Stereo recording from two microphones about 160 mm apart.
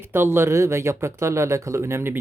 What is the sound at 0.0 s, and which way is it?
Speech, 15° right (ahead or behind).